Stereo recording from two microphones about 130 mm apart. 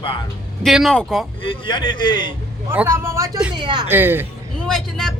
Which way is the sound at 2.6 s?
20° right (ahead or behind).